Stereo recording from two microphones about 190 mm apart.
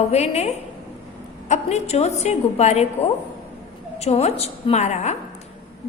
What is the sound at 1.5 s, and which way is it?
A woman's voice, 35° left (ahead or behind).